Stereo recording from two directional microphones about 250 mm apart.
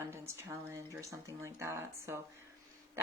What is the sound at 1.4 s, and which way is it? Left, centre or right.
Speech, centre.